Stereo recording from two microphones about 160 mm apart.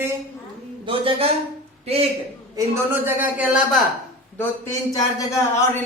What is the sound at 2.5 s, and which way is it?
Speech, 15° right (ahead or behind).